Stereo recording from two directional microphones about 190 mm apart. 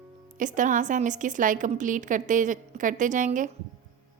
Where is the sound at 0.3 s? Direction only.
40° right (ahead or behind).